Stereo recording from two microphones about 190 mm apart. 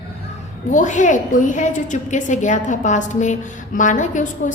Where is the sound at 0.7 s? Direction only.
40° left (ahead or behind).